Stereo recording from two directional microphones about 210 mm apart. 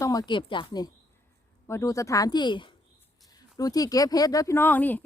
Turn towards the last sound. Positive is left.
turn(degrees=10)  # may be behind; listen again after turning